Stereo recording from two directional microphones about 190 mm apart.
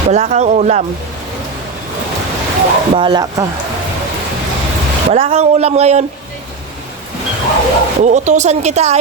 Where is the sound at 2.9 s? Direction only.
25° right (ahead or behind).